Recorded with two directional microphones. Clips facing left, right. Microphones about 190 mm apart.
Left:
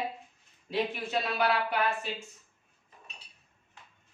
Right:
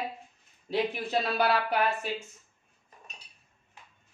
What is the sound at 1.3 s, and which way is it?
Speech, 35° right (ahead or behind).